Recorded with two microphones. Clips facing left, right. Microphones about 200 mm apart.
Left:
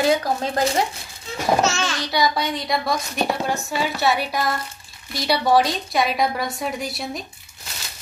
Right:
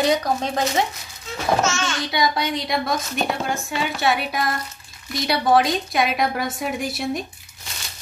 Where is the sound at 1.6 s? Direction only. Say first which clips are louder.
Left 1 dB; 35° left (ahead or behind).